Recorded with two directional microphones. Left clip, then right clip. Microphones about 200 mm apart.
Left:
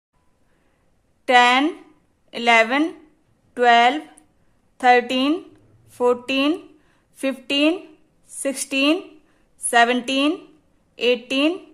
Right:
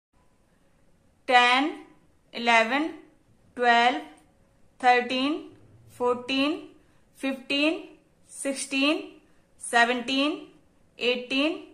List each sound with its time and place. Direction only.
1.2 s a woman's voice: 45° left (ahead or behind)